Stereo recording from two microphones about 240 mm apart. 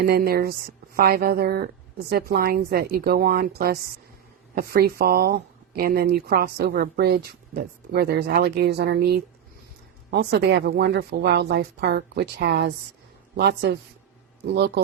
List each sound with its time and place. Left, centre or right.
0.0 s a woman's voice: right